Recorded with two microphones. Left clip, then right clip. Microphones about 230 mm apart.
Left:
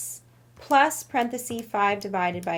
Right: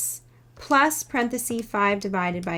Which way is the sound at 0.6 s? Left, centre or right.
Centre.